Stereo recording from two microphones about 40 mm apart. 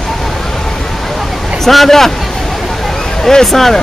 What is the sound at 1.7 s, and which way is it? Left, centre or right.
Speech, centre.